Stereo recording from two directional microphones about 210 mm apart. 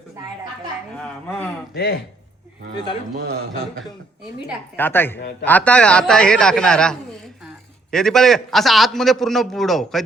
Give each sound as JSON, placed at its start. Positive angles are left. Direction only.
{"t": 1.7, "sound": "speech", "side_deg": 50}
{"t": 4.8, "sound": "a man's voice", "side_deg": 10}